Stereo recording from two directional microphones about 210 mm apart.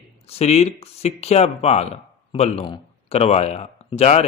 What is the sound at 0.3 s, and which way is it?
Speech, 30° left (ahead or behind).